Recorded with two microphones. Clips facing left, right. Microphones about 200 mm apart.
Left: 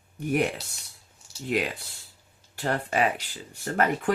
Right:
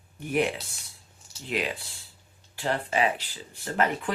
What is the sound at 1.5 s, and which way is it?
Speech, 45° left (ahead or behind).